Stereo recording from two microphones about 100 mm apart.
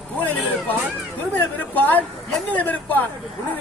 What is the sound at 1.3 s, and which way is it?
A man's voice, 20° left (ahead or behind).